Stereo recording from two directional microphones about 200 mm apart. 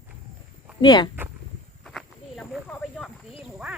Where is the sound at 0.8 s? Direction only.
20° left (ahead or behind).